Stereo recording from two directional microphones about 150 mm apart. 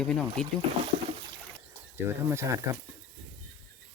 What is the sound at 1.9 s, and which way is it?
Speech, 20° right (ahead or behind).